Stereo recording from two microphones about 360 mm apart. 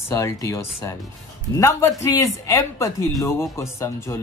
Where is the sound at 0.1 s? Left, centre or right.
Centre.